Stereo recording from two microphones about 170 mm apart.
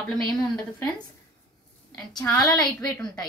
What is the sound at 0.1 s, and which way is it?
Speech, centre (ahead or behind).